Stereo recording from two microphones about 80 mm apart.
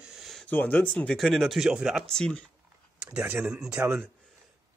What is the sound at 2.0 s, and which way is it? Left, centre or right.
Speech, centre.